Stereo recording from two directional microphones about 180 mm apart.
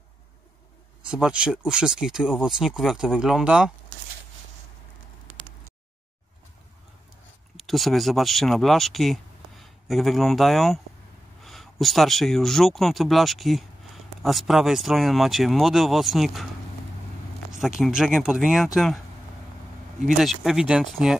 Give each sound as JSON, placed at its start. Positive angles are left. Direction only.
{"t": 1.1, "sound": "speech", "side_deg": -5}
{"t": 7.5, "sound": "speech", "side_deg": 0}
{"t": 17.5, "sound": "speech", "side_deg": -5}
{"t": 20.2, "sound": "speech", "side_deg": 0}